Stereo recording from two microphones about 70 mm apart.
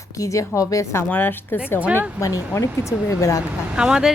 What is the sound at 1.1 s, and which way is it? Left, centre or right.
Speech, left.